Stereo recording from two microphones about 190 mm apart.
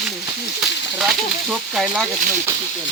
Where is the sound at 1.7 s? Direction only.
Centre (ahead or behind).